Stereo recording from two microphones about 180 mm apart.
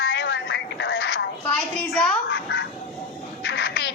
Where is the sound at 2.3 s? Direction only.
90° left.